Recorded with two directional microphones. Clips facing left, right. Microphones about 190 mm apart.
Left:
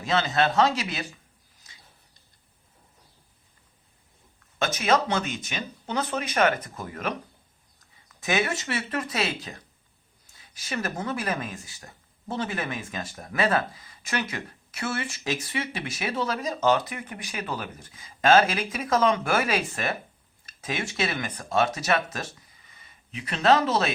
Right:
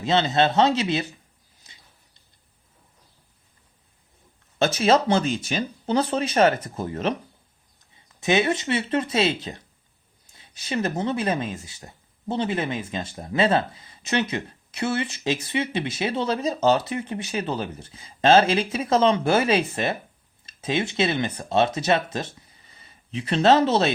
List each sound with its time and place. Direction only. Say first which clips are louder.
0.0 s speech: right 4 dB; 25° right (ahead or behind)
4.6 s speech: right 5 dB; 30° right (ahead or behind)